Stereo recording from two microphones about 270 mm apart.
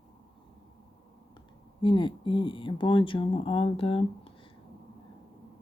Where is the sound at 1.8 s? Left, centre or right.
Centre.